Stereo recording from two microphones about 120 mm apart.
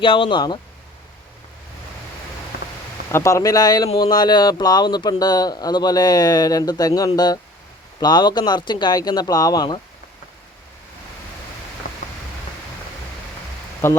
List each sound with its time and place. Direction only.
0.0 s speech: 45° left (ahead or behind)
3.1 s speech: 25° left (ahead or behind); by 9.8 s 40° left (ahead or behind)
13.8 s speech: 20° left (ahead or behind)